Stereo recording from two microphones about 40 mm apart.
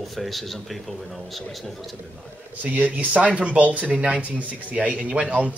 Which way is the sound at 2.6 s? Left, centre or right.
Right.